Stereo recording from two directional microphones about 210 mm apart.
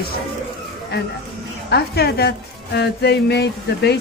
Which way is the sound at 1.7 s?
50° left (ahead or behind).